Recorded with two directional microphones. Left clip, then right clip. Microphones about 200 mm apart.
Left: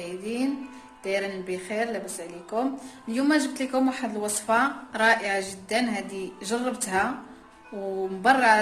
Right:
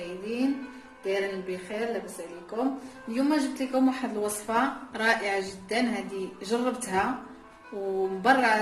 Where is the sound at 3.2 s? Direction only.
25° left (ahead or behind).